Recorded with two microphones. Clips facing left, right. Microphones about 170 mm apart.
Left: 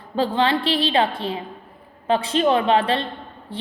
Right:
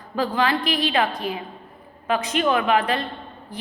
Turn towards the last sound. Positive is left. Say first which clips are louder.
# left 2 dB
turn(degrees=30)  # may be behind; listen again after turning